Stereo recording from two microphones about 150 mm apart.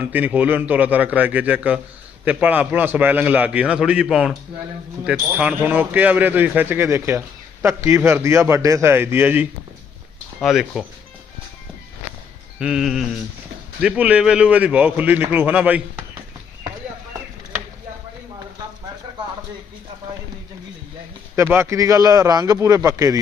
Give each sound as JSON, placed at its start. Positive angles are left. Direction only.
{"t": 0.0, "sound": "speech", "side_deg": -10}
{"t": 10.4, "sound": "sheep", "side_deg": 0}
{"t": 12.5, "sound": "sheep", "side_deg": -5}
{"t": 13.8, "sound": "speech", "side_deg": -10}
{"t": 21.3, "sound": "a man's voice", "side_deg": -15}